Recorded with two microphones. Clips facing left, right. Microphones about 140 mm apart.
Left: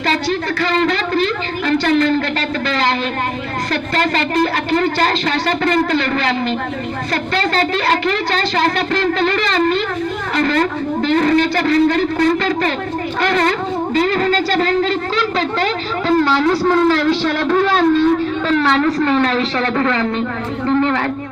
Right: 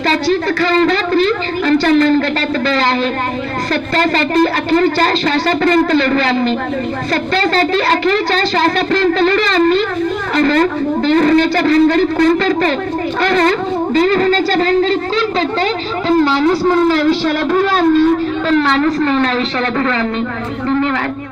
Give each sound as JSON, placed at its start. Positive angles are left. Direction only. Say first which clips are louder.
{"t": 0.1, "sound": "a sound", "louder": "right 5 dB", "side_deg": -35}
{"t": 1.9, "sound": "a woman's voice", "louder": "right 3 dB", "side_deg": -40}
{"t": 3.9, "sound": "a woman's voice", "louder": "right 4 dB", "side_deg": -35}
{"t": 7.3, "sound": "a woman's voice", "louder": "right 3 dB", "side_deg": -35}
{"t": 13.2, "sound": "a woman's voice", "louder": "right 3 dB", "side_deg": -35}
{"t": 16.3, "sound": "speech", "louder": "right 2 dB", "side_deg": -15}